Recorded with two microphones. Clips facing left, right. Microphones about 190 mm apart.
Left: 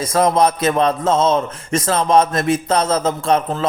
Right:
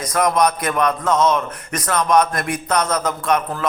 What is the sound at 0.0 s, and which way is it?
A man's voice, 25° left (ahead or behind).